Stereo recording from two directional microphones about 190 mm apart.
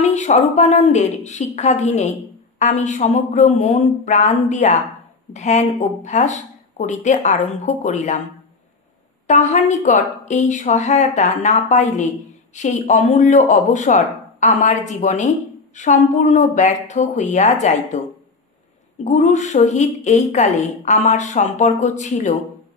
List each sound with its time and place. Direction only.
0.0 s speech: 40° left (ahead or behind)
9.3 s speech: 40° left (ahead or behind)
19.0 s speech: 40° left (ahead or behind)